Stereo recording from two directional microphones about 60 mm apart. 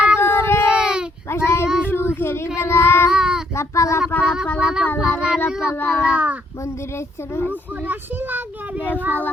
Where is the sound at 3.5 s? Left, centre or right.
Left.